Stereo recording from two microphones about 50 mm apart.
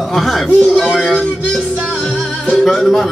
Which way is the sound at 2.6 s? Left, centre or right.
Centre.